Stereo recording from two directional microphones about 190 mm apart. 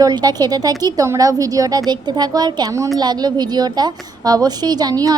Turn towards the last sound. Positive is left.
turn(degrees=-20)  # may be behind; listen again after turning